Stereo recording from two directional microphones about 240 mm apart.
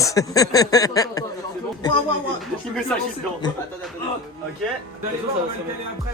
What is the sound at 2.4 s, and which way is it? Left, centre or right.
Speech, centre.